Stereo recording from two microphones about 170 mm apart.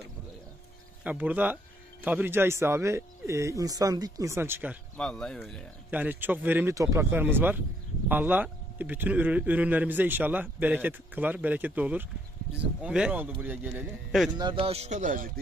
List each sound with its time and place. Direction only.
1.0 s speech: 10° right (ahead or behind)
4.9 s speech: 5° left (ahead or behind)
5.9 s speech: 10° right (ahead or behind)
14.3 s a man's voice: 30° right (ahead or behind); by 15.3 s 50° right (ahead or behind)